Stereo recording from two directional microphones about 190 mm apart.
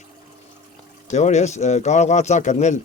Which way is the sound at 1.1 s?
40° left (ahead or behind).